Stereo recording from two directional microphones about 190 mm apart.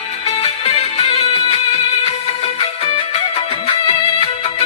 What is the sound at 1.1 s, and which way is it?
Music, 35° left (ahead or behind).